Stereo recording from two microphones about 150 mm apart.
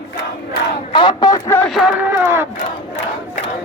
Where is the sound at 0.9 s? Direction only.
30° left (ahead or behind).